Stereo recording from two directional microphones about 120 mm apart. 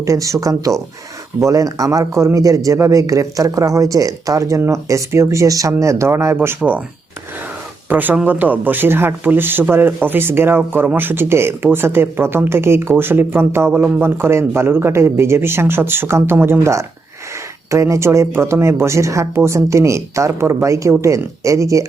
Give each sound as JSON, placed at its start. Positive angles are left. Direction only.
{"t": 0.0, "sound": "speech", "side_deg": -25}
{"t": 7.9, "sound": "speech", "side_deg": -15}